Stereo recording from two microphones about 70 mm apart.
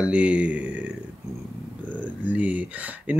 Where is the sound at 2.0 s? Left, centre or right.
Right.